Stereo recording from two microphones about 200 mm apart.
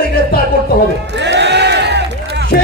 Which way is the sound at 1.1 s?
60° right (ahead or behind).